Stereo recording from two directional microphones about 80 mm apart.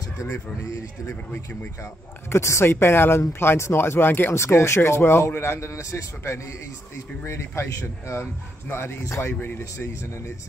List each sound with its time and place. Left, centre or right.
1.3 s speech: left
2.2 s speech: left